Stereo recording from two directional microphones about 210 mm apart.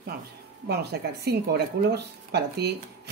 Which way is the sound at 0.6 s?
50° right (ahead or behind).